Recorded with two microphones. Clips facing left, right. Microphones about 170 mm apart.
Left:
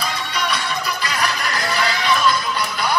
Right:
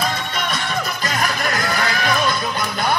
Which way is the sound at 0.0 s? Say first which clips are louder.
Right 1 dB; 50° right (ahead or behind).